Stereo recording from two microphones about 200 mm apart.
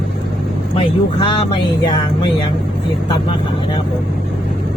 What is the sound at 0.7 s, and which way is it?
Speech, 25° left (ahead or behind).